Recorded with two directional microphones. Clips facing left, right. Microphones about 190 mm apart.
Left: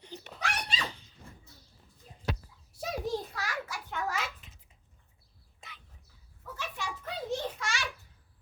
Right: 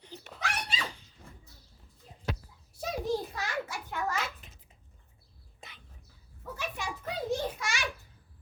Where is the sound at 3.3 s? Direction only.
25° right (ahead or behind).